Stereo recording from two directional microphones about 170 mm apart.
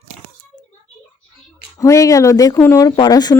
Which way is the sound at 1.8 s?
20° left (ahead or behind).